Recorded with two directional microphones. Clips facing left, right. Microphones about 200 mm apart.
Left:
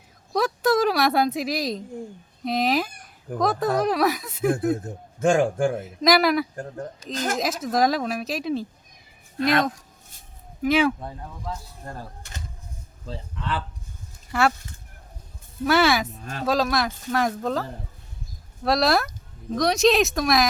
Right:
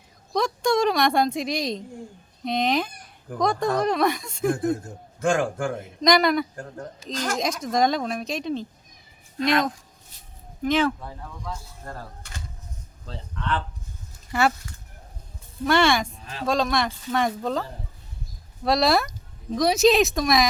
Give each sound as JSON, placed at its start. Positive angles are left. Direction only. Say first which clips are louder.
{"t": 0.3, "sound": "a woman's voice", "louder": "left 1 dB", "side_deg": 5}
{"t": 5.2, "sound": "a man's voice", "louder": "left 3 dB", "side_deg": 25}
{"t": 6.0, "sound": "speech", "louder": "even", "side_deg": 5}
{"t": 13.1, "sound": "speech", "louder": "right 1 dB", "side_deg": 5}
{"t": 15.6, "sound": "speech", "louder": "even", "side_deg": 5}
{"t": 16.1, "sound": "speech", "louder": "left 4 dB", "side_deg": 45}
{"t": 16.5, "sound": "speech", "louder": "even", "side_deg": 5}